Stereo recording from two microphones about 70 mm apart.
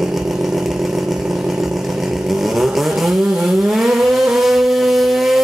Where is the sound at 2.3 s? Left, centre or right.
Centre.